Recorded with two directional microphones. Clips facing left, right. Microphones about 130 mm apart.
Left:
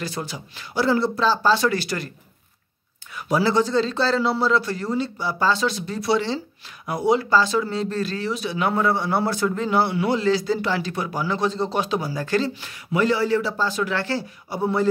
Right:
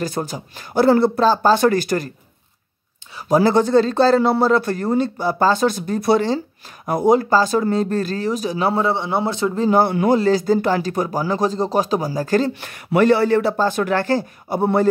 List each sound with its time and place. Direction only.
0.0 s speech: 45° right (ahead or behind)
3.2 s speech: 45° right (ahead or behind); by 9.7 s 25° right (ahead or behind)
9.7 s speech: 45° right (ahead or behind)